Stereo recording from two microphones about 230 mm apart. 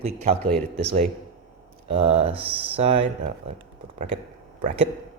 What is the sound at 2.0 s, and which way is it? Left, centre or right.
Speech, right.